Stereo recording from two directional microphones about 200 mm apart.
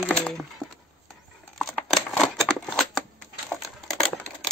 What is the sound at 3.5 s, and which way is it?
Crumpling, centre (ahead or behind).